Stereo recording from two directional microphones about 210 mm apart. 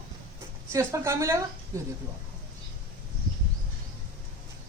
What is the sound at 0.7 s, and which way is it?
Speech, 15° right (ahead or behind).